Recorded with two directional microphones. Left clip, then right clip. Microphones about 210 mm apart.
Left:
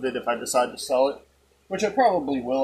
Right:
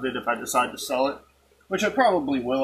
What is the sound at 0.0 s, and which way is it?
Speech, 5° left (ahead or behind).